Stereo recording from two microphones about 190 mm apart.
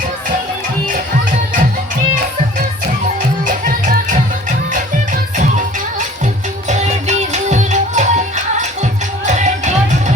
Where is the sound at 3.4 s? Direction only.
45° right (ahead or behind).